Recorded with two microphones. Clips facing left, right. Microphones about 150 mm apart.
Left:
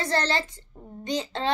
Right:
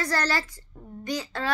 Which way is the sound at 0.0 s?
25° left (ahead or behind).